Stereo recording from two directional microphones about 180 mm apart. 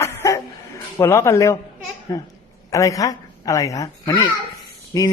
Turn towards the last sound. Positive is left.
turn(degrees=20)  # may be behind; listen again after turning